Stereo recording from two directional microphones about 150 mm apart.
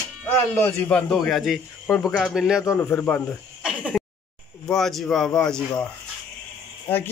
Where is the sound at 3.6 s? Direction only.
5° right (ahead or behind).